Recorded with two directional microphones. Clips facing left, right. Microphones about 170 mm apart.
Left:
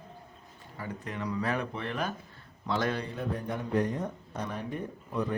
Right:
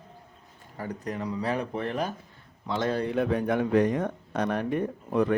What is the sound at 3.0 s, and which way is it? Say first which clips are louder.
A man's voice: right 9 dB; 80° right.